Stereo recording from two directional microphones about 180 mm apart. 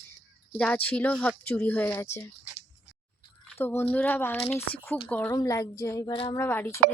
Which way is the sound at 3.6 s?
15° left (ahead or behind).